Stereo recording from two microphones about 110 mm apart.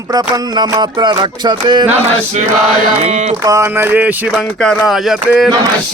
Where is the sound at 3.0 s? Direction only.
90° right.